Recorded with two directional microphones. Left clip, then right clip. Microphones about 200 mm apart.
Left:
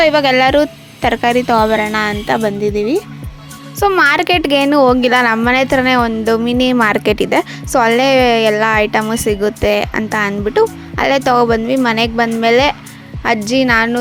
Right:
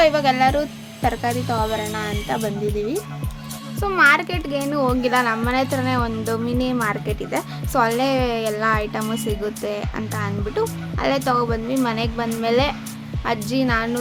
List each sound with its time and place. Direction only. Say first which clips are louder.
0.0 s a woman's voice: left 6 dB; 35° left (ahead or behind)